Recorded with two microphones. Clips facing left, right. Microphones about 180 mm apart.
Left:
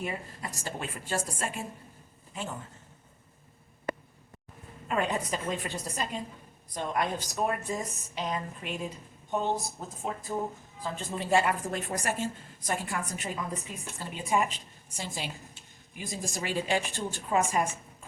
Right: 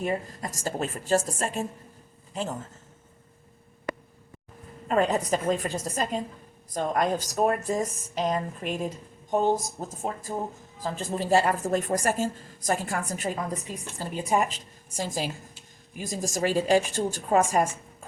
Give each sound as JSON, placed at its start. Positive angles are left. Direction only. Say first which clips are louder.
{"t": 0.0, "sound": "a woman's voice", "louder": "right 7 dB", "side_deg": -40}
{"t": 4.9, "sound": "a woman's voice", "louder": "right 6 dB", "side_deg": -40}